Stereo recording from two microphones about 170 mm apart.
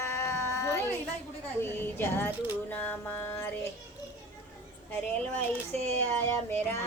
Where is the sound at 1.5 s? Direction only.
15° left (ahead or behind).